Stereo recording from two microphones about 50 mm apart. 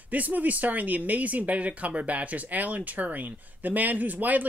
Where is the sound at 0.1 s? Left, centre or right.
Right.